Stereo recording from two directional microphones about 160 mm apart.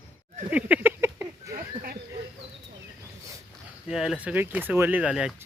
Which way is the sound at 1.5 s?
65° right (ahead or behind).